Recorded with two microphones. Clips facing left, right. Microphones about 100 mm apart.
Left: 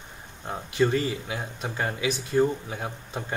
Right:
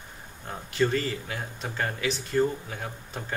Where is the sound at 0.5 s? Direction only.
15° left (ahead or behind).